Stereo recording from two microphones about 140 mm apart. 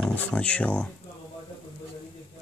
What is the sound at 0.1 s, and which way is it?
Speech, 10° left (ahead or behind).